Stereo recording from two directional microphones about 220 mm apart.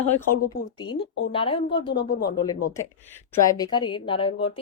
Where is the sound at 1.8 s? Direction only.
45° left (ahead or behind).